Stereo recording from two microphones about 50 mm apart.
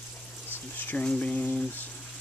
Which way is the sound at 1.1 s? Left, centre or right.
Left.